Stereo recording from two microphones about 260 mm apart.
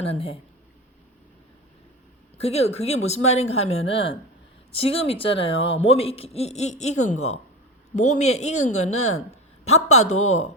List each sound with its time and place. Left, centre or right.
0.0 s speech: left
2.4 s speech: left